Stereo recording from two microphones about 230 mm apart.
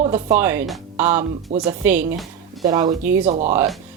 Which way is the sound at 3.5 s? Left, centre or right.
Centre.